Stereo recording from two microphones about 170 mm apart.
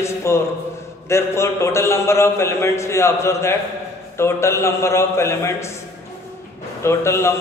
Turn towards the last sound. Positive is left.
turn(degrees=15)  # may be behind; listen again after turning